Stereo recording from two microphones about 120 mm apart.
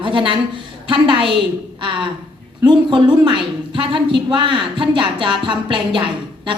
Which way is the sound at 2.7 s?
40° right (ahead or behind).